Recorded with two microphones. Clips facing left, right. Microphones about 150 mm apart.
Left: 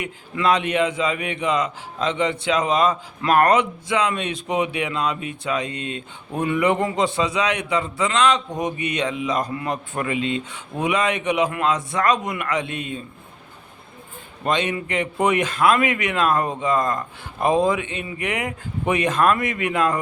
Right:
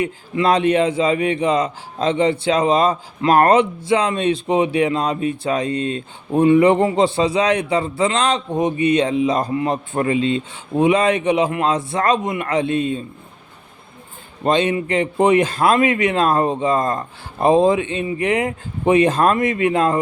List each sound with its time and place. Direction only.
0.0 s a man's voice: 30° right (ahead or behind)
14.4 s a man's voice: 30° right (ahead or behind)